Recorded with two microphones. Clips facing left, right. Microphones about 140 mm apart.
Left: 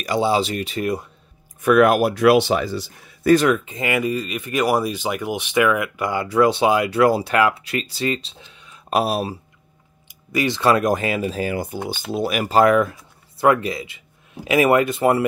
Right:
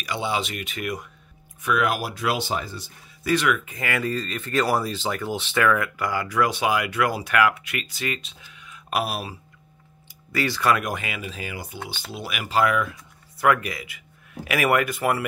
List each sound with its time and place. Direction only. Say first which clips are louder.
0.0 s speech: left 8 dB; 40° left (ahead or behind)
1.6 s speech: left 9 dB; 50° left (ahead or behind); by 2.9 s 90° left
3.3 s speech: left 7 dB; 40° left (ahead or behind)
10.3 s speech: left 4 dB; 20° left (ahead or behind); by 12.9 s 40° left (ahead or behind)
13.4 s speech: left 4 dB; 30° left (ahead or behind)